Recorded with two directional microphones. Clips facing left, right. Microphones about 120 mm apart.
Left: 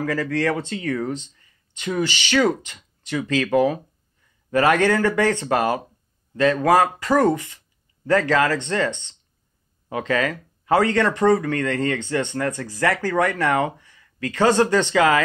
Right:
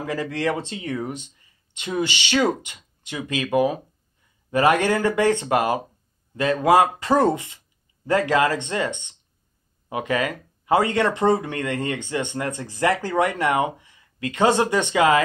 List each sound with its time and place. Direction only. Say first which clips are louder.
0.0 s speech: left 3 dB; 20° right (ahead or behind)